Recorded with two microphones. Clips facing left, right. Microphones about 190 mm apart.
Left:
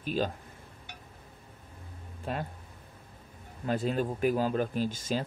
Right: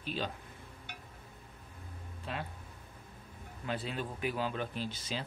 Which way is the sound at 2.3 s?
45° left (ahead or behind).